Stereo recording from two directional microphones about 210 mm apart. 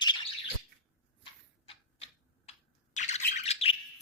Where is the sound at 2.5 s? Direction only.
30° left (ahead or behind).